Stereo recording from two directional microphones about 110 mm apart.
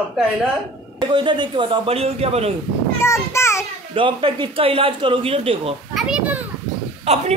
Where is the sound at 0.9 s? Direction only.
50° right (ahead or behind); by 2.5 s 70° right (ahead or behind).